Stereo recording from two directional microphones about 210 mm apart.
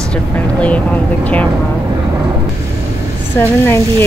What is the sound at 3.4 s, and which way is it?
Speech, 10° left (ahead or behind).